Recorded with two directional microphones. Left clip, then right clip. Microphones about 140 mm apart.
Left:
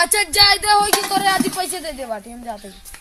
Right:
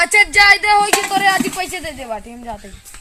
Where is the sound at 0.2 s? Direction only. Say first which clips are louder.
Right 6 dB; 35° left (ahead or behind).